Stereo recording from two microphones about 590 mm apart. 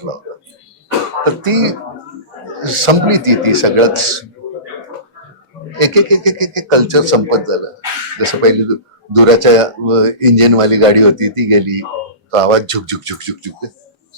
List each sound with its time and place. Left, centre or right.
1.2 s music: right
2.6 s a man's voice: right
5.8 s speech: right